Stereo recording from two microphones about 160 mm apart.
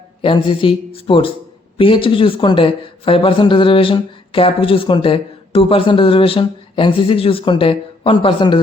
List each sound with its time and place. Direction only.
0.2 s speech: 35° left (ahead or behind)